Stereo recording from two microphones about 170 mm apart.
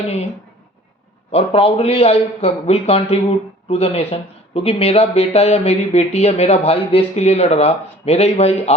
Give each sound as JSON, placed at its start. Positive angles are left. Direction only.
{"t": 1.3, "sound": "speech", "side_deg": 35}